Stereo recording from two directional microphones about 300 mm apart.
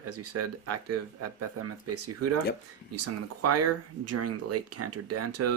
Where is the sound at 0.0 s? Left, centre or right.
Right.